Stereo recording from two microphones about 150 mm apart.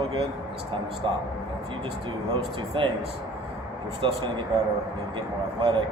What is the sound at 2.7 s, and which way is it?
Speech, 35° right (ahead or behind).